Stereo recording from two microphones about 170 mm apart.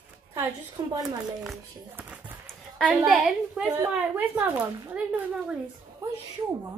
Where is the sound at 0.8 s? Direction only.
20° right (ahead or behind).